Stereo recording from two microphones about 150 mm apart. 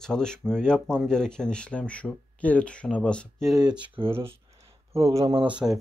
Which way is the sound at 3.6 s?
30° right (ahead or behind).